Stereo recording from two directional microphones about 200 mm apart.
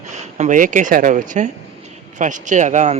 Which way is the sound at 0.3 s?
40° right (ahead or behind).